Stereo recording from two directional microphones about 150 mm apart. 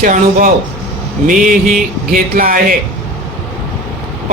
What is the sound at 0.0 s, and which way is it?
Speech, 65° right (ahead or behind).